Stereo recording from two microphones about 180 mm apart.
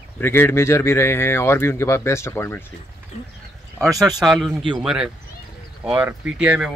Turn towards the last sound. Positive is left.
turn(degrees=-5)  # may be behind; listen again after turning